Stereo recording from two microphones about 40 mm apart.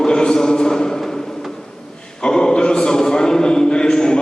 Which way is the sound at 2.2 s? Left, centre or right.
Centre.